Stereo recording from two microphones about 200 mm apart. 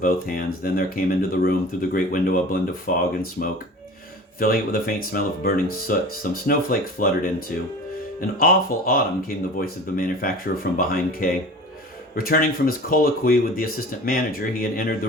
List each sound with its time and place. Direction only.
0.0 s speech: 45° left (ahead or behind)
4.4 s speech: 45° left (ahead or behind)